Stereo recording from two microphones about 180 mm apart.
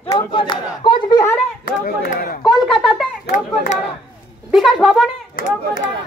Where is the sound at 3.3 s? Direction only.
45° left (ahead or behind).